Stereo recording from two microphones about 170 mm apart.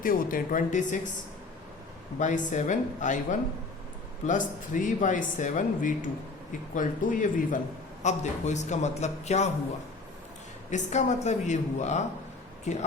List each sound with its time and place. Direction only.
0.0 s speech: 55° left (ahead or behind)
2.1 s speech: 45° left (ahead or behind)
10.7 s speech: 45° left (ahead or behind)